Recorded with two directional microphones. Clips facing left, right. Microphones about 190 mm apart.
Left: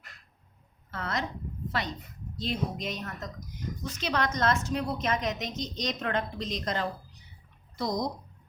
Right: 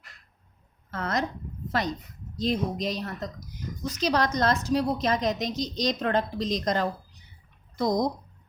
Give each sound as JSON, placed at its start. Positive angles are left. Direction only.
{"t": 0.9, "sound": "a woman's voice", "side_deg": -40}
{"t": 7.8, "sound": "speech", "side_deg": -50}